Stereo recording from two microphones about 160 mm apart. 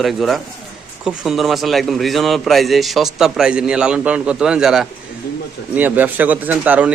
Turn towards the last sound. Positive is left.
turn(degrees=-10)  # may be behind; listen again after turning